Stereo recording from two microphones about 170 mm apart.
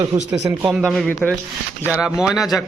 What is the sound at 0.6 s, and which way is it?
A man's voice, centre (ahead or behind).